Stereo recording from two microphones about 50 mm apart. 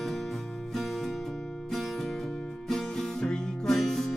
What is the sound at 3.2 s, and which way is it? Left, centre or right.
Music, centre.